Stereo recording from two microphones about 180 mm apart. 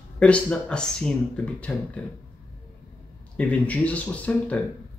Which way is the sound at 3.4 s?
10° left (ahead or behind).